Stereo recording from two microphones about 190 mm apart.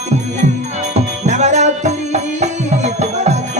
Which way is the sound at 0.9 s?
35° right (ahead or behind).